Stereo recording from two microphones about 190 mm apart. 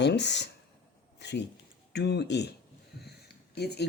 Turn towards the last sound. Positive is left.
turn(degrees=60)  # may be behind; listen again after turning